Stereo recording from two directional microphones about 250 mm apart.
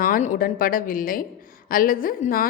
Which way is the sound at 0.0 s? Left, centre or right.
Left.